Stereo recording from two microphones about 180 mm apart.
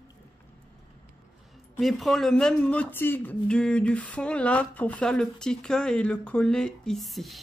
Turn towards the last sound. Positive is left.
turn(degrees=0)  # may be behind; listen again after turning